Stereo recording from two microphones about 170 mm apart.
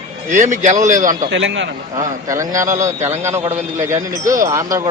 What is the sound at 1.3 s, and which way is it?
Speech, 90° right.